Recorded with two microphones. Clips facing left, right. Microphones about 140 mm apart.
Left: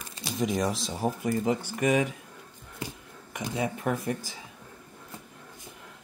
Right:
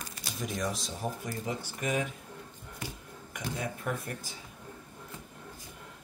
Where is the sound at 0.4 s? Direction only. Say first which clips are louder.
Left 7 dB; 90° left.